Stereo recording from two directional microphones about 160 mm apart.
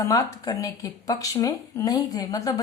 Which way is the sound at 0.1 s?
25° left (ahead or behind).